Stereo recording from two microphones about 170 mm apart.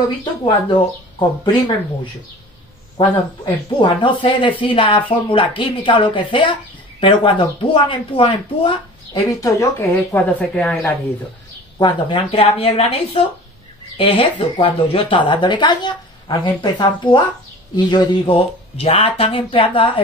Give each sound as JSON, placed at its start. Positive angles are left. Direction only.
{"t": 0.2, "sound": "speech", "side_deg": 30}
{"t": 3.4, "sound": "speech", "side_deg": 30}
{"t": 9.4, "sound": "speech", "side_deg": 15}
{"t": 11.8, "sound": "speech", "side_deg": 30}